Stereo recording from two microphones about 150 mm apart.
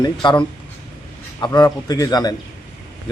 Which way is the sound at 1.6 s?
25° left (ahead or behind).